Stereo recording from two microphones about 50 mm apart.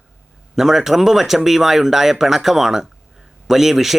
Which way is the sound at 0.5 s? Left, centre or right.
Centre.